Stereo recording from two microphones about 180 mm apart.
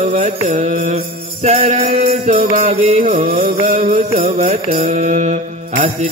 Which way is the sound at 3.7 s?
45° right (ahead or behind).